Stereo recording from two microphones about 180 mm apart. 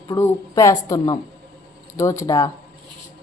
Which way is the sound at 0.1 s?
20° left (ahead or behind).